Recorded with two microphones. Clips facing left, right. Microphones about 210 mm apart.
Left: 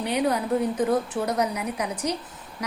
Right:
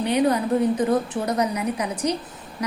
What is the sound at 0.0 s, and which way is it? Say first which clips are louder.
A woman's voice: right 4 dB; 5° left (ahead or behind).